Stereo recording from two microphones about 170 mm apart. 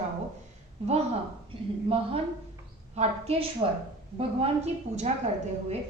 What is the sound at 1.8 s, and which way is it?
A woman's voice, 35° right (ahead or behind).